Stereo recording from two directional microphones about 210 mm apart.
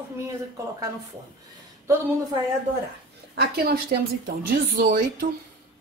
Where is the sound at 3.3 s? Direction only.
50° right (ahead or behind).